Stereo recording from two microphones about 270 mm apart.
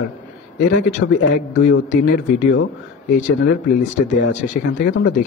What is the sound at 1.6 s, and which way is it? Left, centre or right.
Speech, left.